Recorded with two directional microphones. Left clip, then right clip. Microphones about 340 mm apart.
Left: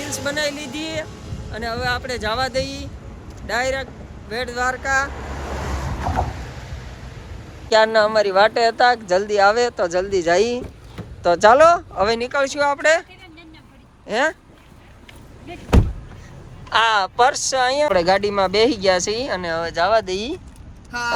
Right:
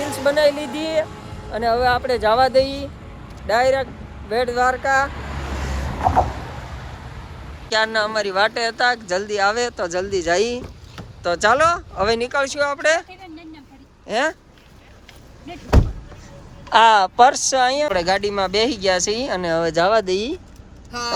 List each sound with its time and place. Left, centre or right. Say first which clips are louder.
0.0 s a sound: right 3 dB; centre
0.3 s speech: right 8 dB; centre
5.1 s vehicle: left 1 dB; left
6.1 s vehicle: right 6 dB; centre
7.7 s speech: left 5 dB; centre
14.1 s speech: left 1 dB; centre
16.6 s speech: right 4 dB; centre